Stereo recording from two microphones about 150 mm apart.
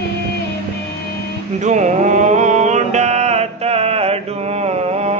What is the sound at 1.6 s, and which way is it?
Mantra, 55° right (ahead or behind).